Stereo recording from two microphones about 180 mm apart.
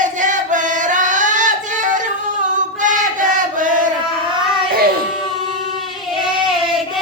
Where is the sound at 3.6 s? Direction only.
45° right (ahead or behind).